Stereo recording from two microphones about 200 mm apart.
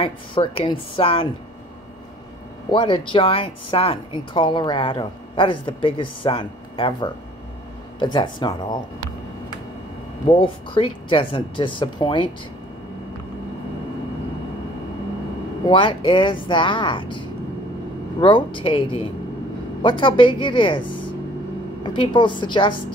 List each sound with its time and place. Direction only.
0.0 s a woman's voice: 25° left (ahead or behind)
2.7 s a woman's voice: 25° left (ahead or behind)
10.2 s a woman's voice: 25° left (ahead or behind)
15.6 s a woman's voice: 25° left (ahead or behind)